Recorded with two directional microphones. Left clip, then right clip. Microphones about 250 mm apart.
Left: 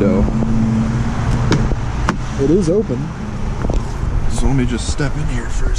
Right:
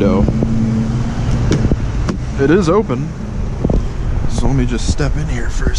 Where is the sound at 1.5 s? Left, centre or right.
Centre.